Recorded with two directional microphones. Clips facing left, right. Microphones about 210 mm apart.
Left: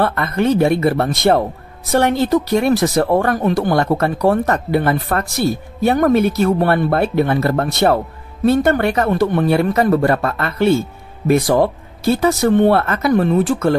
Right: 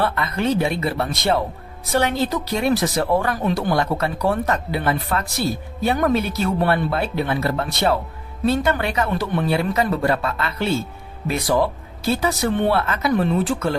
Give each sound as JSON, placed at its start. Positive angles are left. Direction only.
{"t": 0.0, "sound": "speech", "side_deg": 50}